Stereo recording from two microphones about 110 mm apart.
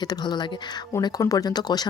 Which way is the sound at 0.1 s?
40° left (ahead or behind).